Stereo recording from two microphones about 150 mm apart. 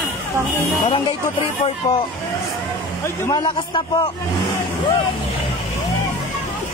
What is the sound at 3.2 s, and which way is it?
Speech, 30° left (ahead or behind).